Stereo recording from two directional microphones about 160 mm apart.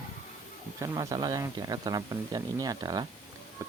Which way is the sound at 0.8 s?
20° right (ahead or behind).